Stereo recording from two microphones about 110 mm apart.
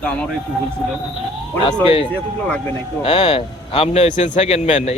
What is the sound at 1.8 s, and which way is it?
Speech, 55° left (ahead or behind).